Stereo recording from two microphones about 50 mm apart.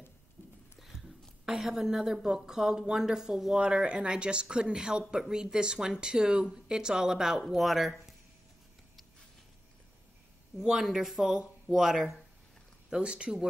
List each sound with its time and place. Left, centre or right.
0.7 s a sound: centre
1.4 s speech: centre
10.6 s speech: centre
12.9 s speech: centre